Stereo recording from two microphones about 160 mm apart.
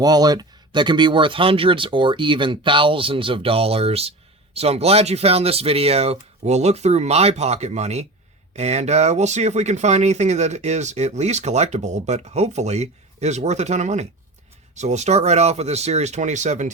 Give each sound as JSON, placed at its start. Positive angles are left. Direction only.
{"t": 0.0, "sound": "speech", "side_deg": -25}